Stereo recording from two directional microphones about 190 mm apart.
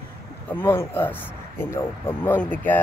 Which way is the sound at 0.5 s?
10° left (ahead or behind).